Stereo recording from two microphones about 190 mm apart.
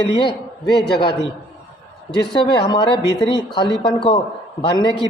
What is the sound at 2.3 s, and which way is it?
A man's voice, 25° left (ahead or behind).